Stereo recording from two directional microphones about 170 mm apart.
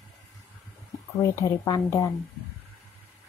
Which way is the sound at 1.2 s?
20° left (ahead or behind).